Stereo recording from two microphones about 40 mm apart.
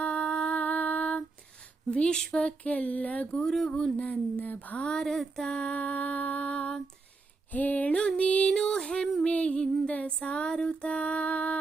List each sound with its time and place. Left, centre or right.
0.0 s a sound: left
0.5 s music: left
1.9 s female singing: left
3.3 s a sound: centre
3.9 s female singing: left
4.4 s music: left
4.8 s a sound: centre
5.4 s female singing: left
5.7 s music: left
7.5 s a sound: left
7.9 s female singing: left
9.2 s music: left
10.2 s female singing: left